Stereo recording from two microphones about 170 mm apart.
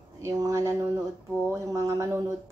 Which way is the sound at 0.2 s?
20° right (ahead or behind).